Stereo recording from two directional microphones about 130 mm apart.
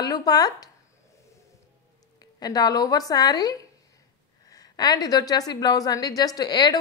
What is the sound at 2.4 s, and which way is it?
A woman's voice, 30° left (ahead or behind).